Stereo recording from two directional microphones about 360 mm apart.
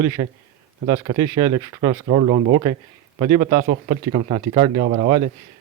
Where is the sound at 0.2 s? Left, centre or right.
Centre.